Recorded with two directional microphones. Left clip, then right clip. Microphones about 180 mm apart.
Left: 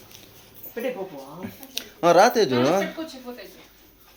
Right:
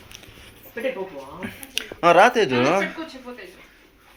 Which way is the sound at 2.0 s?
15° left (ahead or behind).